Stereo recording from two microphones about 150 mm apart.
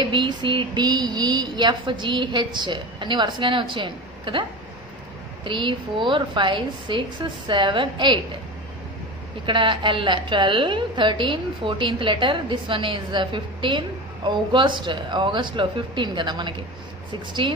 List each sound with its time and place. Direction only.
0.0 s a woman's voice: 30° right (ahead or behind)
9.5 s a woman's voice: 35° right (ahead or behind)